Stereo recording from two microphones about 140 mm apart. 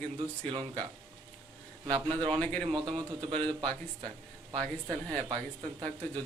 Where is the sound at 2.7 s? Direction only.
35° right (ahead or behind).